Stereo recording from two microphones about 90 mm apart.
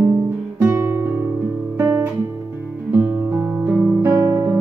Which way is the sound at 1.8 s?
35° right (ahead or behind).